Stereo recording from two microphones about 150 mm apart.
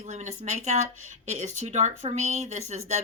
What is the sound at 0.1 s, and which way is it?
Speech, 50° right (ahead or behind).